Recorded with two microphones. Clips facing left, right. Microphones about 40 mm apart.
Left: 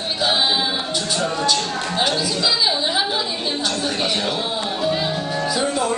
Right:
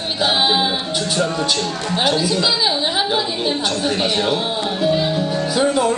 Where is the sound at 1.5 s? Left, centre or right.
Centre.